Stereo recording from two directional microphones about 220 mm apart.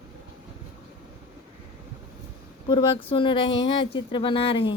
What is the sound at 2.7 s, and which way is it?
A woman's voice, 20° left (ahead or behind).